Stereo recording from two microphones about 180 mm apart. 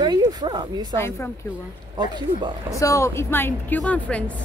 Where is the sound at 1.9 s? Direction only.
25° right (ahead or behind).